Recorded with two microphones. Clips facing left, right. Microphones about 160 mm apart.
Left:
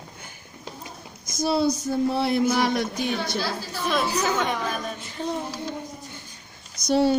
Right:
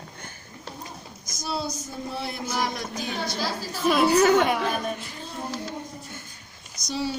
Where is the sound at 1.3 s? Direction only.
60° left (ahead or behind).